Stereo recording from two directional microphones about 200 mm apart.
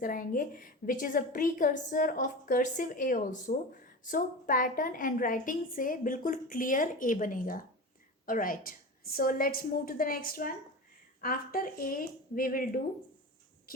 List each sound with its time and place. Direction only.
0.0 s a woman's voice: 45° left (ahead or behind)